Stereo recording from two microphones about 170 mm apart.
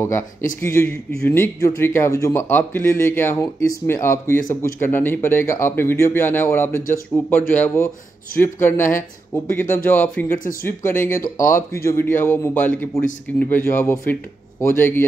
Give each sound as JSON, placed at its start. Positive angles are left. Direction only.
{"t": 0.0, "sound": "speech", "side_deg": 15}
{"t": 10.4, "sound": "speech", "side_deg": 55}
{"t": 11.3, "sound": "speech", "side_deg": 15}